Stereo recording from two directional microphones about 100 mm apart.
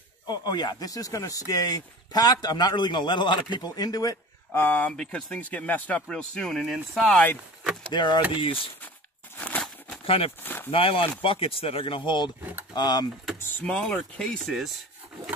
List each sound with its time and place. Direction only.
0.3 s a man's voice: 45° left (ahead or behind)
4.5 s speech: 15° left (ahead or behind); by 7.2 s centre (ahead or behind)
7.9 s a man's voice: 50° left (ahead or behind)
9.4 s a sound: 15° left (ahead or behind)
10.0 s speech: 70° left (ahead or behind)
10.4 s a sound: 20° left (ahead or behind)
10.7 s speech: 65° left (ahead or behind)
12.7 s speech: 45° left (ahead or behind)
13.6 s speech: 10° left (ahead or behind)